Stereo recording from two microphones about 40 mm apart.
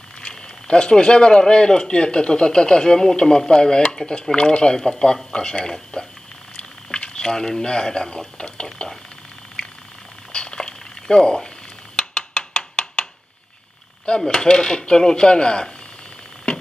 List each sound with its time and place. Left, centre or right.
0.3 s speech: left
10.3 s a sound: left
14.0 s speech: centre